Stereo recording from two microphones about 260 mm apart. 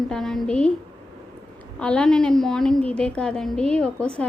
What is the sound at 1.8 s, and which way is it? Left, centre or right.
A woman's voice, centre.